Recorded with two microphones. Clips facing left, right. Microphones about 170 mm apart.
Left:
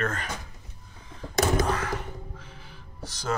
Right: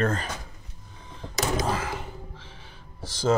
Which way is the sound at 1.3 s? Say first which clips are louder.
Left 3 dB; 55° left (ahead or behind).